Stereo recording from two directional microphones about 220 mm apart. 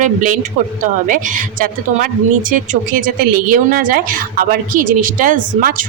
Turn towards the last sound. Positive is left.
turn(degrees=-35)  # may be behind; listen again after turning